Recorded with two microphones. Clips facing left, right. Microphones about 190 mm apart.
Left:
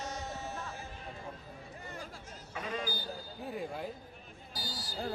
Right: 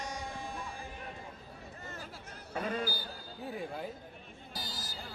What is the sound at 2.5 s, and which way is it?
Speech, 55° right (ahead or behind).